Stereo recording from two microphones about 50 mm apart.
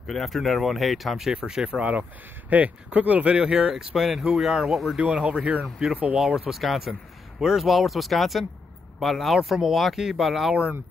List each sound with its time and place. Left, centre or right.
0.0 s speech: centre
1.3 s speech: centre
1.8 s speech: right
3.7 s speech: centre
4.9 s speech: right
6.1 s speech: centre
6.9 s a man's voice: centre
7.5 s speech: centre